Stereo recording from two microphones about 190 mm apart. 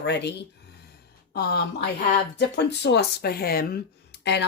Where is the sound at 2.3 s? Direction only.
65° left (ahead or behind).